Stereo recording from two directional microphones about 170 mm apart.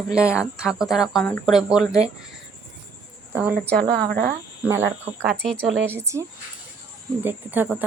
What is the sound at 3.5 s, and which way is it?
Speech, 75° right (ahead or behind).